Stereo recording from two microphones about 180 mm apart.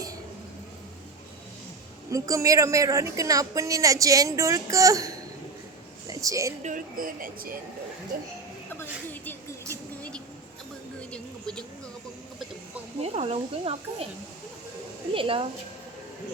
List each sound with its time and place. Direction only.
2.0 s a woman's voice: 20° right (ahead or behind)
6.1 s a sound: 20° right (ahead or behind)
6.6 s speech: 45° right (ahead or behind)
11.1 s a sound: 5° left (ahead or behind)
13.0 s speech: 35° right (ahead or behind)
15.1 s a woman's voice: 30° right (ahead or behind)